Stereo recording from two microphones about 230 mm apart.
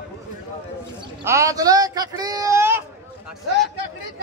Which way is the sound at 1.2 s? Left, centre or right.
Centre.